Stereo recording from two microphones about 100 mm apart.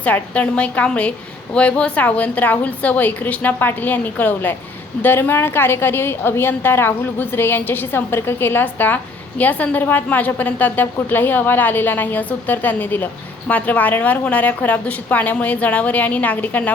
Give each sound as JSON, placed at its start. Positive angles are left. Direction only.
{"t": 0.0, "sound": "a woman's voice", "side_deg": 15}